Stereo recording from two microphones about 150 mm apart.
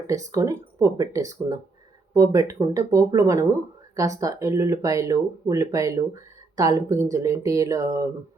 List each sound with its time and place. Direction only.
0.1 s speech: 20° right (ahead or behind)